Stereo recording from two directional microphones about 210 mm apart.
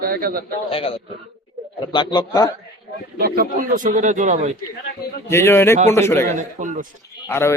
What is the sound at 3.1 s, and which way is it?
A man's voice, 45° right (ahead or behind).